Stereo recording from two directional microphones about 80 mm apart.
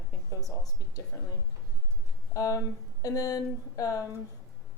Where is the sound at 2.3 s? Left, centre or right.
Left.